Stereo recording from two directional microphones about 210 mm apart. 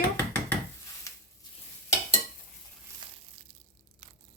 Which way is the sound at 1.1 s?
15° left (ahead or behind).